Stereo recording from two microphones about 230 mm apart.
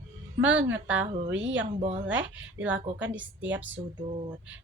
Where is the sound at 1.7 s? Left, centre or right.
Right.